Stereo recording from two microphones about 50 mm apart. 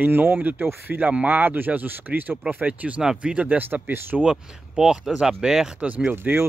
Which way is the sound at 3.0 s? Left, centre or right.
Centre.